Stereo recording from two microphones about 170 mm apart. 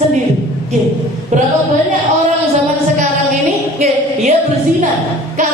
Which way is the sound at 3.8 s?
40° right (ahead or behind).